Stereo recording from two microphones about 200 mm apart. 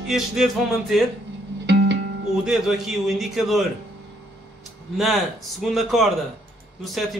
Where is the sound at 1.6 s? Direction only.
60° right (ahead or behind).